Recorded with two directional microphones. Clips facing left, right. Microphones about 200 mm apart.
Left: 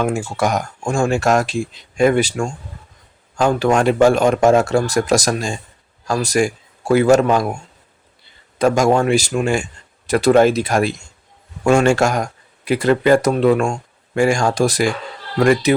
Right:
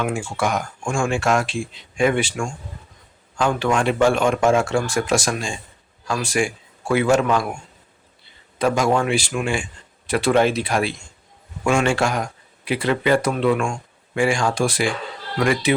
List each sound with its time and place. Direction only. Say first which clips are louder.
0.0 s a man's voice: left 4 dB; 40° left (ahead or behind)
8.5 s speech: left 4 dB; 45° left (ahead or behind)